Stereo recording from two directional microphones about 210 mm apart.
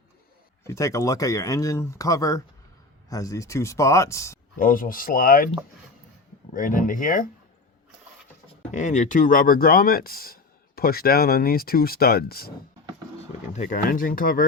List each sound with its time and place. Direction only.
0.6 s speech: 15° left (ahead or behind)
4.5 s speech: 40° left (ahead or behind)
6.5 s speech: 40° left (ahead or behind)
8.7 s speech: 35° left (ahead or behind)
13.5 s speech: 35° left (ahead or behind)